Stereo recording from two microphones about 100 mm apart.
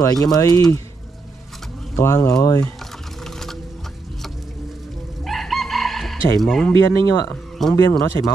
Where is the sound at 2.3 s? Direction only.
35° left (ahead or behind).